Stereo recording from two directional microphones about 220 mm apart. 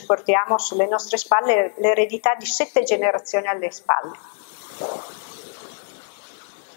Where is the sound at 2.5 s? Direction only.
60° left (ahead or behind).